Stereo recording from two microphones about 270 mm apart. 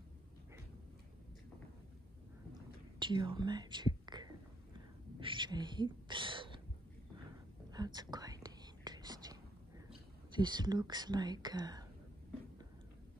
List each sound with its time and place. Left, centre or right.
3.0 s speech: centre
5.2 s a sound: centre
7.7 s whispering: centre
9.8 s speech: centre